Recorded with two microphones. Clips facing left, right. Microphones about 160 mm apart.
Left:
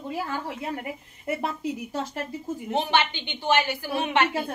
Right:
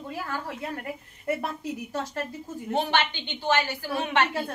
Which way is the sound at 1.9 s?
15° left (ahead or behind).